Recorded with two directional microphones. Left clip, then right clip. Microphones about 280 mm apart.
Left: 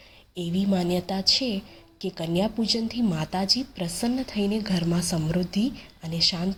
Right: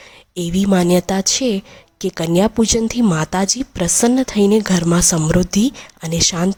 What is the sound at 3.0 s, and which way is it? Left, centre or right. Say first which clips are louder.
Speech: right 10 dB; right.